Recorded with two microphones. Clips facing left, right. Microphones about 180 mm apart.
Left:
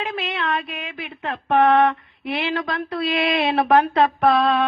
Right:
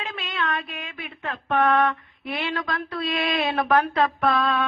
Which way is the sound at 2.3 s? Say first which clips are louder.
Left 4 dB; 30° left (ahead or behind).